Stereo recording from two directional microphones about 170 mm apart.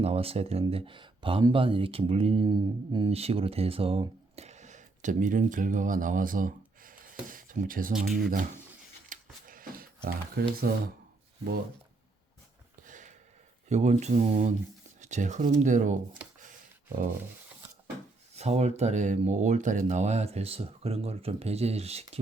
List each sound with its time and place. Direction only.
0.0 s speech: 35° right (ahead or behind); by 7.9 s 55° right (ahead or behind)
7.9 s speech: centre (ahead or behind)
9.0 s a sound: 55° right (ahead or behind)
12.8 s a sound: 45° right (ahead or behind)
13.7 s speech: 40° right (ahead or behind)
18.3 s speech: 40° right (ahead or behind)